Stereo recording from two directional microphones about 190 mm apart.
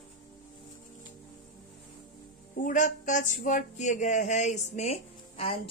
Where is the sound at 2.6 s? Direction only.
40° left (ahead or behind).